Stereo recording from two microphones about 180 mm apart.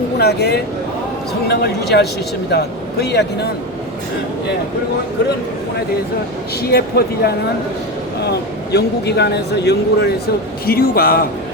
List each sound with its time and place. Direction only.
0.2 s speech: 65° left (ahead or behind)
6.7 s speech: 65° left (ahead or behind)
10.7 s speech: 55° left (ahead or behind)